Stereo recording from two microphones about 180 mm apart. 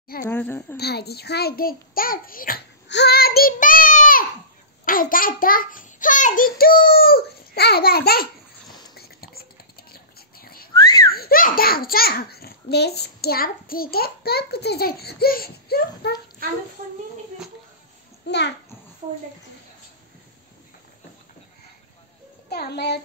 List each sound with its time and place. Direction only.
0.3 s a woman's voice: 10° left (ahead or behind)
0.7 s a child's voice: 65° left (ahead or behind)
2.9 s a child's voice: 65° left (ahead or behind)
8.9 s whispering: 60° left (ahead or behind)
10.7 s whistling: 20° left (ahead or behind)
11.1 s a child's voice: 55° left (ahead or behind)
16.4 s speech: 55° right (ahead or behind)
18.2 s a child's voice: 75° left (ahead or behind)
22.5 s a child's voice: 65° left (ahead or behind)